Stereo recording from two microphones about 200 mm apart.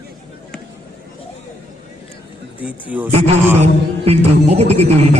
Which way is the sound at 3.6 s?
30° right (ahead or behind).